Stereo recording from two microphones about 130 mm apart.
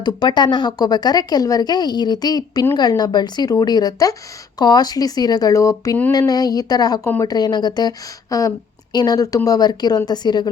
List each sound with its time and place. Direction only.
0.0 s a woman's voice: 35° left (ahead or behind)